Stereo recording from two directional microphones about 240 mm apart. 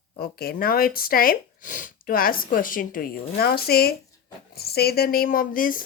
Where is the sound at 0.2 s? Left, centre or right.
Left.